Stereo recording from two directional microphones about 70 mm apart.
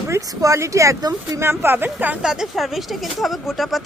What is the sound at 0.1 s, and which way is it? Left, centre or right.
Speech, right.